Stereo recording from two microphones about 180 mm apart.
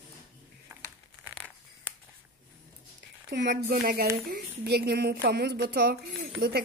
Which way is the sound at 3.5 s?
55° right (ahead or behind).